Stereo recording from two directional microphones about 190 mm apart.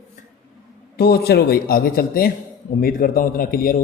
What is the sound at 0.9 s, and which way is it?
Speech, 55° left (ahead or behind).